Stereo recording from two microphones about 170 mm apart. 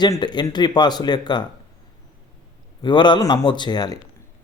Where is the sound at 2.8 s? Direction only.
25° left (ahead or behind).